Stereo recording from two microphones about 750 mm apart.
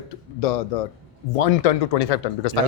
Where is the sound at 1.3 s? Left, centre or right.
Left.